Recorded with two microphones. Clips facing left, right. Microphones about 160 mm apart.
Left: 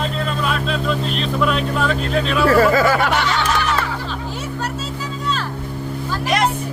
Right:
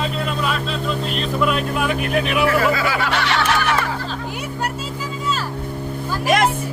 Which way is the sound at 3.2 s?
75° right (ahead or behind).